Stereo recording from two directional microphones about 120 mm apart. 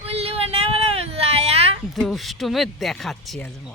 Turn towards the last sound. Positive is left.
turn(degrees=0)  # may be behind; listen again after turning